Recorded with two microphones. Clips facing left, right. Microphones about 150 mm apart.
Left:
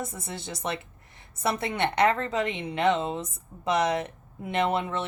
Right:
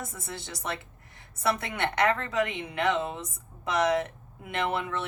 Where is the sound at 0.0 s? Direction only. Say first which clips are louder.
Left 3 dB; 25° left (ahead or behind).